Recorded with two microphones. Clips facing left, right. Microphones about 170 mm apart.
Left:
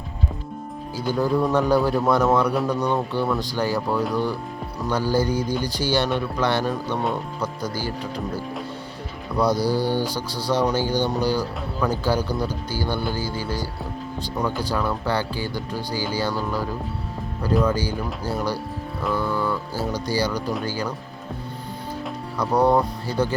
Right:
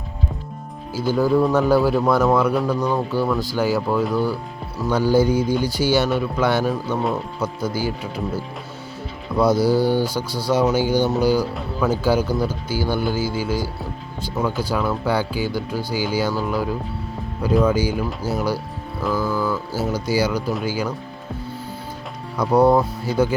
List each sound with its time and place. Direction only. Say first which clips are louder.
1.0 s speech: right 4 dB; 5° right (ahead or behind)
9.5 s speech: right 6 dB; 15° left (ahead or behind)
10.5 s speech: right 3 dB; 10° right (ahead or behind)
19.0 s mantra: right 2 dB; centre (ahead or behind)
19.9 s speech: right 3 dB; 10° right (ahead or behind)
22.4 s speech: right 3 dB; 10° right (ahead or behind)